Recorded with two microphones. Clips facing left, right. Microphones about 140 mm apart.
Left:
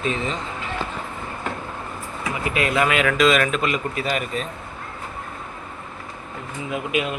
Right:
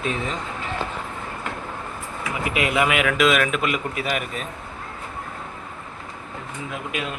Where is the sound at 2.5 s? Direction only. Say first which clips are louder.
Left 1 dB; 15° right (ahead or behind).